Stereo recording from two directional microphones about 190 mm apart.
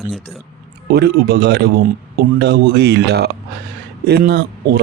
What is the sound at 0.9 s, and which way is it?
Speech, 60° right (ahead or behind).